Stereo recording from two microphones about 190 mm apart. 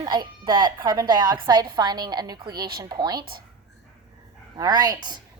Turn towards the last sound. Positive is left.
turn(degrees=-20)  # may be behind; listen again after turning